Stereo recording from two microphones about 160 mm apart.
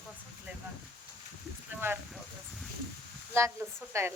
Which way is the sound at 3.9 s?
20° right (ahead or behind).